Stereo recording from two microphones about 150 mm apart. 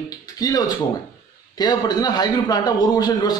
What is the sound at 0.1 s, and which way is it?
A man's voice, 25° left (ahead or behind).